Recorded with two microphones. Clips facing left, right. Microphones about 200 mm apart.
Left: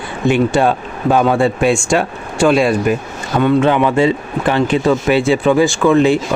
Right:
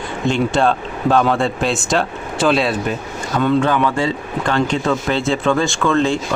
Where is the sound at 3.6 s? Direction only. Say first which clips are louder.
Left 5 dB; 20° left (ahead or behind).